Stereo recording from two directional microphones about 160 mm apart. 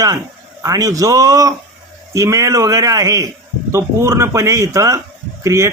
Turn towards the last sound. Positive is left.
turn(degrees=-15)  # may be behind; listen again after turning